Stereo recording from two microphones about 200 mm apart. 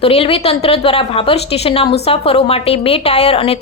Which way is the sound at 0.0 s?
30° left (ahead or behind).